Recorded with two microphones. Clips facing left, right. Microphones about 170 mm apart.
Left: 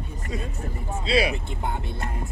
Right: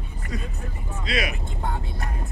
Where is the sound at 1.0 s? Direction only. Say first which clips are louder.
Left 5 dB; 30° left (ahead or behind).